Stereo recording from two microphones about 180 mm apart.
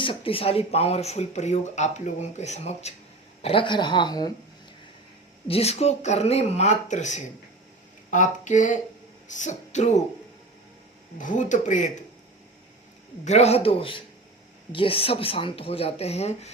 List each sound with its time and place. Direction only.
0.0 s a woman's voice: 30° left (ahead or behind)
5.5 s speech: 35° left (ahead or behind)
11.2 s speech: 45° left (ahead or behind)
13.2 s speech: 35° left (ahead or behind)